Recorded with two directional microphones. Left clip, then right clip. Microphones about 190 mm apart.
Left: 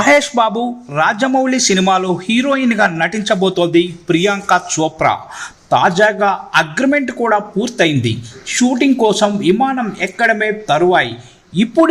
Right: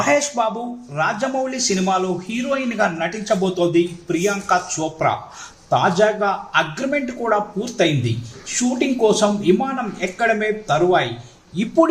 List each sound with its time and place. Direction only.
0.0 s speech: 40° left (ahead or behind)